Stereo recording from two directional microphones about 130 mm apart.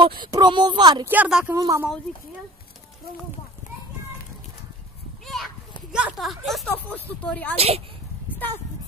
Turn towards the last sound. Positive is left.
turn(degrees=-50)  # may be behind; listen again after turning